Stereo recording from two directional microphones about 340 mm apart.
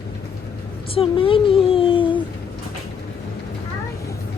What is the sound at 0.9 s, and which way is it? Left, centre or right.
Speech, centre.